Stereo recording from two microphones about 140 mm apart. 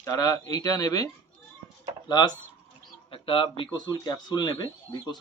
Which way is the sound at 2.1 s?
30° left (ahead or behind).